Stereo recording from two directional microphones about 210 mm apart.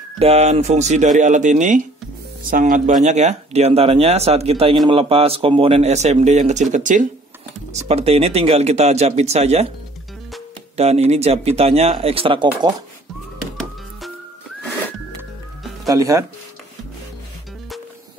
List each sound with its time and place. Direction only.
0.2 s speech: 30° right (ahead or behind)
10.8 s speech: 30° right (ahead or behind)
15.9 s speech: 15° right (ahead or behind)